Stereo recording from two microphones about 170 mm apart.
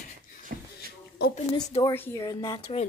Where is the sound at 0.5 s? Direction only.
65° right (ahead or behind).